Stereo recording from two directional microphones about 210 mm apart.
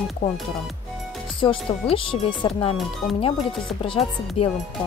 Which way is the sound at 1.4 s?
25° left (ahead or behind).